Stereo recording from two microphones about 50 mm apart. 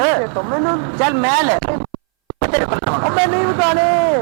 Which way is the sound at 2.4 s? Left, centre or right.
Right.